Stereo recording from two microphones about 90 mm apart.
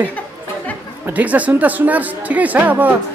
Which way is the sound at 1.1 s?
15° right (ahead or behind).